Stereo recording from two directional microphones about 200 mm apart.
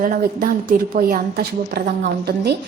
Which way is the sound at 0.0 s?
45° right (ahead or behind).